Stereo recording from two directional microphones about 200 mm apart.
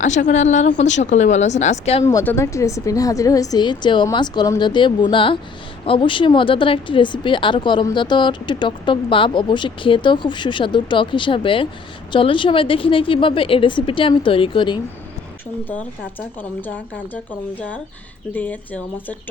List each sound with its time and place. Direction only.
0.0 s a woman's voice: 35° left (ahead or behind)
2.0 s a woman's voice: 15° left (ahead or behind)
16.4 s a woman's voice: 10° left (ahead or behind)
18.3 s a woman's voice: 10° left (ahead or behind)